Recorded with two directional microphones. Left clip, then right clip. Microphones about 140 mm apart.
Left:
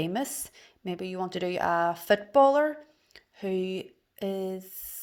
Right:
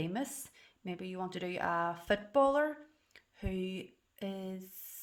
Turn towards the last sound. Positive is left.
turn(degrees=30)  # may be behind; listen again after turning